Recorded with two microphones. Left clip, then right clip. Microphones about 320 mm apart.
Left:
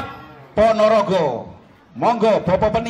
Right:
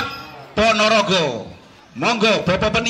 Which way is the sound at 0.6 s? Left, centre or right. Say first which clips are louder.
Left 1 dB; left.